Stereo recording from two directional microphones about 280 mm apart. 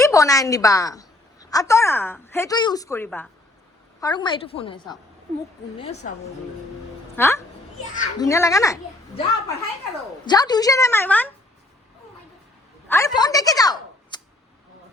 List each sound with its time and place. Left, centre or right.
0.0 s a woman's voice: centre
7.2 s a woman's voice: centre
12.9 s a woman's voice: centre